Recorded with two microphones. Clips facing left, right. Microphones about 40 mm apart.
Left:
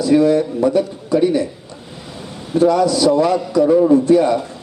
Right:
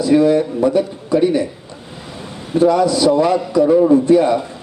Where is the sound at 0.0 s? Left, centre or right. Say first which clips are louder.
Right 1 dB; right.